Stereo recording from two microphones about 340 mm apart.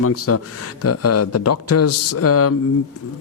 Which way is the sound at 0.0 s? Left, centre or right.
Left.